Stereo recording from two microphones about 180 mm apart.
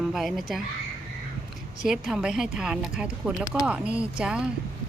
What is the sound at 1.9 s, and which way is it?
Speech, 5° right (ahead or behind).